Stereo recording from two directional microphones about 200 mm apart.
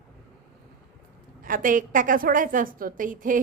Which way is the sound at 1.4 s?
40° right (ahead or behind).